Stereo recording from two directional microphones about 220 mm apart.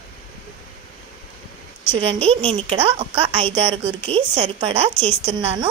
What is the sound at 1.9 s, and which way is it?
A woman's voice, 25° right (ahead or behind).